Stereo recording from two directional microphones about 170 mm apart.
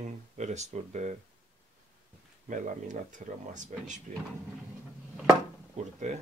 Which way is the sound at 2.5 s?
50° right (ahead or behind).